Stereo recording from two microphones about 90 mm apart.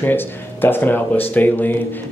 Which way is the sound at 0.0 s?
25° left (ahead or behind).